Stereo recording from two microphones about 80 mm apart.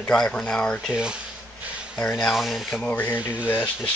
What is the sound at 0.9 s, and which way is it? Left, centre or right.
Speech, centre.